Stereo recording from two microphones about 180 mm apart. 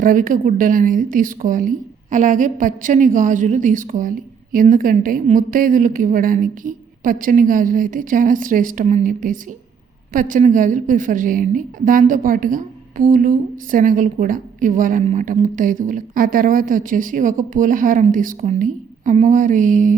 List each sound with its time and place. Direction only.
0.0 s a woman's voice: 50° right (ahead or behind)